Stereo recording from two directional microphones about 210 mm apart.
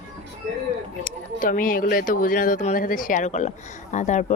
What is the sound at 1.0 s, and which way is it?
Speech, 40° left (ahead or behind).